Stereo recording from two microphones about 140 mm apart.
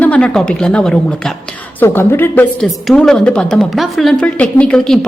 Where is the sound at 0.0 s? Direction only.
10° left (ahead or behind).